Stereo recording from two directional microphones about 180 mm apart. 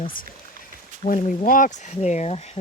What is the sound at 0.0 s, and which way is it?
Speech, 50° left (ahead or behind).